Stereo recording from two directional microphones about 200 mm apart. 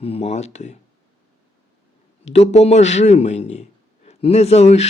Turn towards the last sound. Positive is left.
turn(degrees=35)  # may be behind; listen again after turning